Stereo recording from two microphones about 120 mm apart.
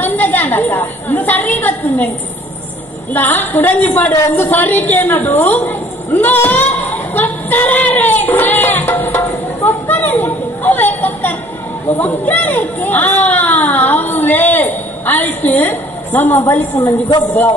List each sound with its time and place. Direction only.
0.0 s chatter: 15° left (ahead or behind)
3.1 s speech: 15° left (ahead or behind)
7.2 s music: 15° left (ahead or behind)
9.7 s a sound: 15° left (ahead or behind)
12.0 s speech: 15° left (ahead or behind)
16.7 s a man's voice: 35° left (ahead or behind)